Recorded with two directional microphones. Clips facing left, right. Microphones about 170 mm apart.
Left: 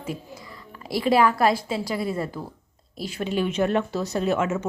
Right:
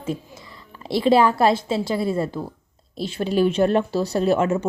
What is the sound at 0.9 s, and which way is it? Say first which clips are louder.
A woman's voice: right 3 dB; 25° right (ahead or behind).